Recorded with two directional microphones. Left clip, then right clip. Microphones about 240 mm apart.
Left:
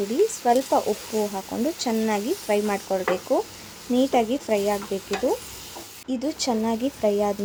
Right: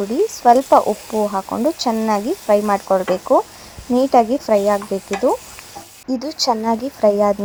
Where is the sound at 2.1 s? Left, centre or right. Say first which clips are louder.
Right 10 dB; centre.